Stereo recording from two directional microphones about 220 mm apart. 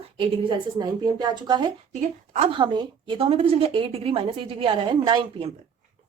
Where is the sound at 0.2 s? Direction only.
20° right (ahead or behind).